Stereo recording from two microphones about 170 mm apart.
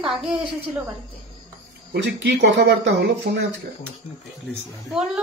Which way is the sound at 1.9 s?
90° right.